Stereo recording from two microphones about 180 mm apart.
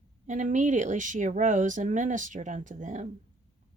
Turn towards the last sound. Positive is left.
turn(degrees=-45)  # may be behind; listen again after turning